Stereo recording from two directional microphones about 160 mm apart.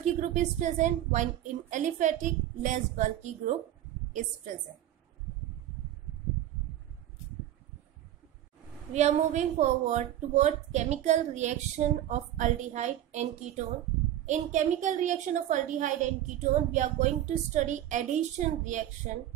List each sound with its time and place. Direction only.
0.0 s a woman's voice: 50° right (ahead or behind)
8.9 s a woman's voice: 45° right (ahead or behind)